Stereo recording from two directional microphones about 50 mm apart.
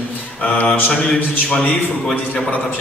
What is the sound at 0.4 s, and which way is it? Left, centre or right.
A man's voice, left.